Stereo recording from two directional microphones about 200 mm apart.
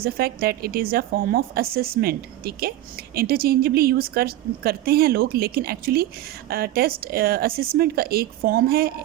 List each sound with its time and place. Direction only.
0.0 s a woman's voice: 50° right (ahead or behind)